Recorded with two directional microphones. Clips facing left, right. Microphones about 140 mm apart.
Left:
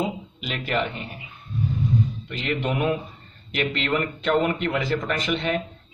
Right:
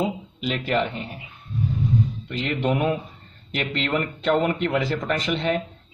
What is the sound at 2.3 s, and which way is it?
Speech, 35° right (ahead or behind).